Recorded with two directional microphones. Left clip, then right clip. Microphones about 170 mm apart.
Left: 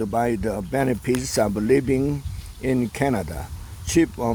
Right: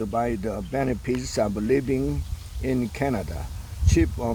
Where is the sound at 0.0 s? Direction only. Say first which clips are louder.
Left 3 dB; 35° left (ahead or behind).